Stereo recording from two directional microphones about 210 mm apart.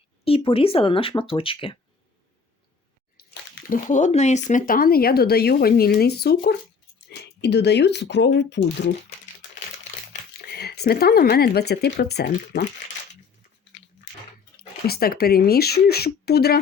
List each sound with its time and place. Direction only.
0.3 s speech: 25° left (ahead or behind)
3.2 s bathtub: 45° left (ahead or behind)
3.7 s speech: 35° left (ahead or behind); by 8.6 s 55° left (ahead or behind)
10.4 s speech: 50° left (ahead or behind)
14.8 s speech: 45° left (ahead or behind)